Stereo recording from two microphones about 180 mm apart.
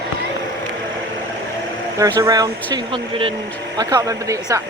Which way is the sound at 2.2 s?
20° right (ahead or behind).